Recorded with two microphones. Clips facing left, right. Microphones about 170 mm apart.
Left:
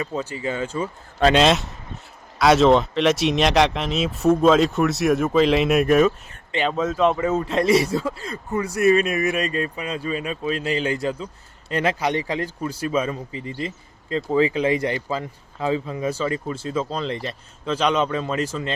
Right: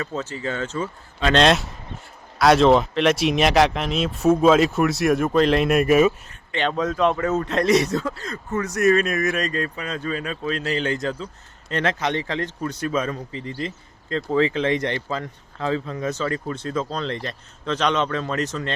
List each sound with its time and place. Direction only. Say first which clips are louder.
0.0 s speech: left 1 dB; 10° left (ahead or behind)
1.9 s a sound: right 1 dB; 45° left (ahead or behind)
2.4 s speech: even; centre (ahead or behind)